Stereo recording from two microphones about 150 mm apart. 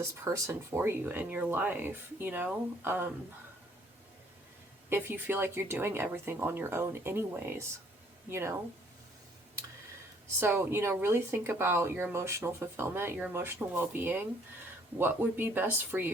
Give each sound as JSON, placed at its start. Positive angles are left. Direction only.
{"t": 0.0, "sound": "speech", "side_deg": -20}
{"t": 4.9, "sound": "speech", "side_deg": -15}
{"t": 10.4, "sound": "speech", "side_deg": -15}